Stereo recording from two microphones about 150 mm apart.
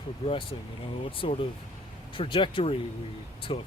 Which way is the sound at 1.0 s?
35° left (ahead or behind).